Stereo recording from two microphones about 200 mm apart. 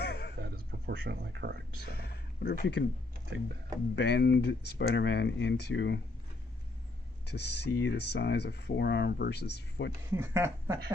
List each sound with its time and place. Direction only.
0.0 s a sound: 55° left (ahead or behind)
0.4 s speech: 50° right (ahead or behind)
2.0 s a sound: 55° left (ahead or behind)
3.9 s speech: 55° left (ahead or behind)
7.3 s speech: 55° left (ahead or behind)
10.2 s speech: 10° right (ahead or behind)